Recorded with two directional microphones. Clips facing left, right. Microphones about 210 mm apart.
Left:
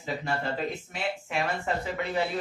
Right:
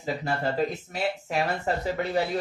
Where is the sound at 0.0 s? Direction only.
40° right (ahead or behind).